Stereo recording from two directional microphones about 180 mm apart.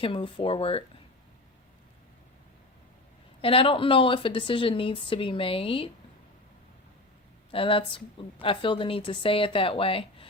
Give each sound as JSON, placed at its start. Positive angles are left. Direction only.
{"t": 0.0, "sound": "a woman's voice", "side_deg": 30}
{"t": 3.4, "sound": "a woman's voice", "side_deg": 30}
{"t": 7.5, "sound": "a woman's voice", "side_deg": 30}